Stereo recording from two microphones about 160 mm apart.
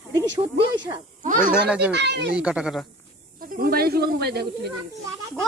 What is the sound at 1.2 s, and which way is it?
Speech, 55° right (ahead or behind).